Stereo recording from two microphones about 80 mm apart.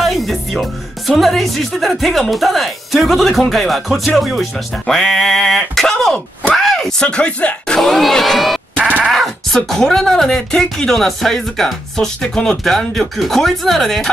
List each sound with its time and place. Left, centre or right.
0.0 s speech: centre
8.8 s a sound: centre
9.1 s sheep: centre
9.6 s speech: centre